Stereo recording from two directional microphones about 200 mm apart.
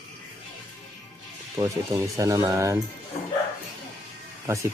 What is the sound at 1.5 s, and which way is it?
Speech, 15° right (ahead or behind).